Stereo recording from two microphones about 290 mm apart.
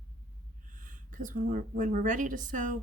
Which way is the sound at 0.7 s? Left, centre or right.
Right.